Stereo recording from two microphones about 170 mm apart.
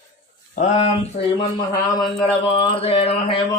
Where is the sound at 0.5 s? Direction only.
45° left (ahead or behind).